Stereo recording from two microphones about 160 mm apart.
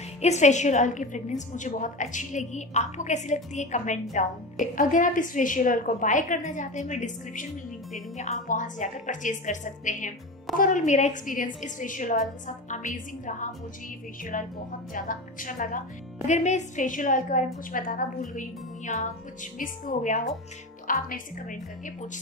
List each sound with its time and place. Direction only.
0.2 s a woman's voice: 45° left (ahead or behind)